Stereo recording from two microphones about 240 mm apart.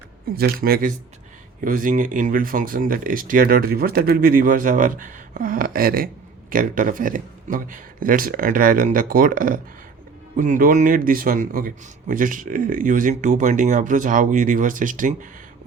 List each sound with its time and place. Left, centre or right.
0.3 s a man's voice: right